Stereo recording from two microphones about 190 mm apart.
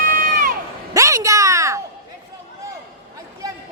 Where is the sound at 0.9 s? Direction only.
15° right (ahead or behind).